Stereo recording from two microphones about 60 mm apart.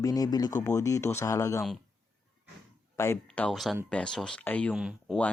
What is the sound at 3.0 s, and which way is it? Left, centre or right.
Speech, left.